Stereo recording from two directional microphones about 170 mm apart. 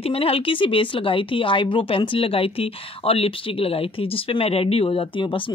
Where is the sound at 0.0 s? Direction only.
35° left (ahead or behind).